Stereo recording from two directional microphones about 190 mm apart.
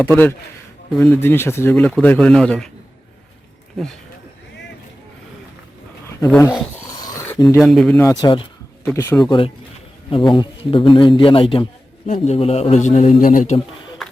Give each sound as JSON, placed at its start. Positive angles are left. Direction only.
{"t": 0.0, "sound": "speech", "side_deg": 10}
{"t": 3.8, "sound": "speech", "side_deg": 0}
{"t": 7.0, "sound": "a sound", "side_deg": 15}
{"t": 7.4, "sound": "speech", "side_deg": 0}
{"t": 8.0, "sound": "a man's voice", "side_deg": 25}
{"t": 8.8, "sound": "speech", "side_deg": 10}
{"t": 10.1, "sound": "a man's voice", "side_deg": 25}